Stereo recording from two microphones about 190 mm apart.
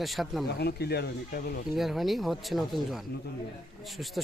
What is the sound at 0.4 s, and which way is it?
Speech, 60° left (ahead or behind).